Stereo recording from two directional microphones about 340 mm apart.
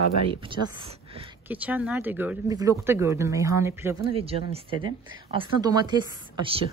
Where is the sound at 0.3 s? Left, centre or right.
Centre.